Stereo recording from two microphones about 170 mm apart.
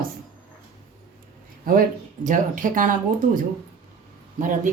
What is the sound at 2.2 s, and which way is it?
Speech, 50° right (ahead or behind).